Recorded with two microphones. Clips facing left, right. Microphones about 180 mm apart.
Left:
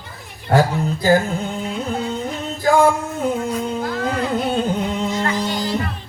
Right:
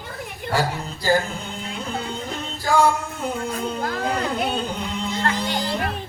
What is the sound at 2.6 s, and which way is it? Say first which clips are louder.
Music: left 4 dB; 50° left (ahead or behind).